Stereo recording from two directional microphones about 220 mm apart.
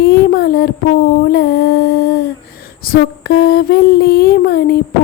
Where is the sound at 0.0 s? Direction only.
45° left (ahead or behind).